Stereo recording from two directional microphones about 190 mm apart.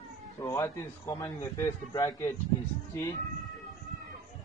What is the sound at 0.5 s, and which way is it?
Speech, 15° left (ahead or behind).